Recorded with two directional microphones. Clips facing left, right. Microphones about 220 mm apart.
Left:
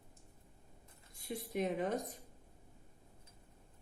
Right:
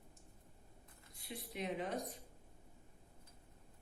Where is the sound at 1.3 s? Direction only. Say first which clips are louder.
Left 6 dB; 45° left (ahead or behind).